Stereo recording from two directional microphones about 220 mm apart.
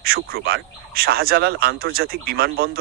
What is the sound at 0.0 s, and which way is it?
Speech, 45° right (ahead or behind).